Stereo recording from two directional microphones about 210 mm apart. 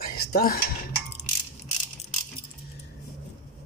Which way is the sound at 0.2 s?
45° left (ahead or behind).